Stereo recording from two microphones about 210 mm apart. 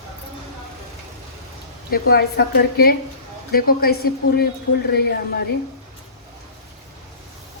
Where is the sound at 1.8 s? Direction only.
45° left (ahead or behind).